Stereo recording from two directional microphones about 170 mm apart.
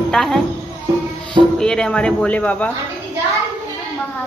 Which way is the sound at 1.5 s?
5° left (ahead or behind).